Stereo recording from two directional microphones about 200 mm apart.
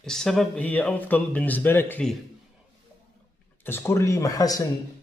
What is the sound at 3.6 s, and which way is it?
A man's voice, 10° left (ahead or behind).